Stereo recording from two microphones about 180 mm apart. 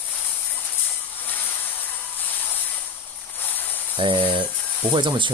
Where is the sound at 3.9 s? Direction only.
30° right (ahead or behind).